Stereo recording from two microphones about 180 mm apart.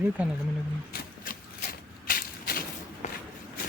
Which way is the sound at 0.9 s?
50° left (ahead or behind).